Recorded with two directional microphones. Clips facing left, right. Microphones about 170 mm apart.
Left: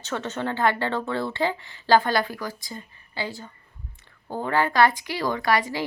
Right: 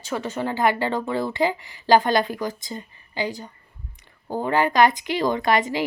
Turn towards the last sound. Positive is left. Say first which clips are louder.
# right 3 dB
turn(degrees=-20)  # may be behind; listen again after turning